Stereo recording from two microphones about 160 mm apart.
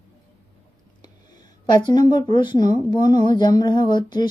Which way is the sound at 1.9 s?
25° left (ahead or behind).